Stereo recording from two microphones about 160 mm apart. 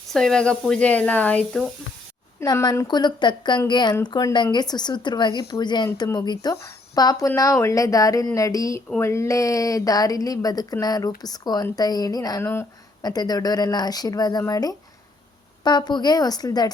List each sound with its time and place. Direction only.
0.1 s speech: 5° left (ahead or behind)
2.4 s a woman's voice: 20° left (ahead or behind)